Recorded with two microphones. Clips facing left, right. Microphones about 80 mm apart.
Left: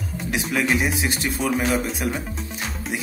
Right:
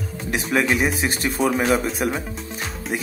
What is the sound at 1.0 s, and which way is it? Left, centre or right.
Speech, right.